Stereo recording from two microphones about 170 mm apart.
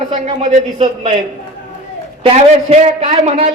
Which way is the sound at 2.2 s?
40° right (ahead or behind).